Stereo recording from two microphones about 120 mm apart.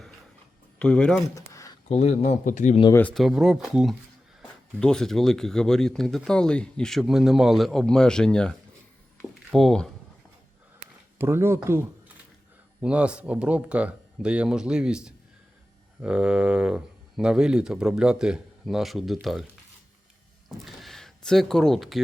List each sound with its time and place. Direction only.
0.8 s speech: 10° left (ahead or behind)
1.4 s a sound: 25° left (ahead or behind)
1.9 s a man's voice: 60° left (ahead or behind)
3.2 s speech: 5° right (ahead or behind)
11.2 s speech: 20° right (ahead or behind)
12.8 s speech: 10° right (ahead or behind)
20.7 s speech: centre (ahead or behind)